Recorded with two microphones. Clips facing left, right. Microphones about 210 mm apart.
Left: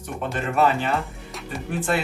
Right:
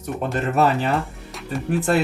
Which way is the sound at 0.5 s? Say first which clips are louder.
Right 1 dB; 40° right (ahead or behind).